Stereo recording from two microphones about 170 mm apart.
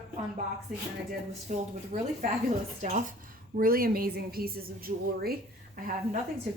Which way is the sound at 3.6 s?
60° right (ahead or behind).